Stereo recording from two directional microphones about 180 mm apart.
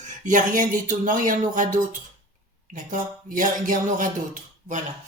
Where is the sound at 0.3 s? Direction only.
45° right (ahead or behind).